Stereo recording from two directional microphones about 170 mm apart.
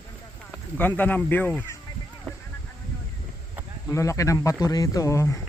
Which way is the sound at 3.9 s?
20° left (ahead or behind).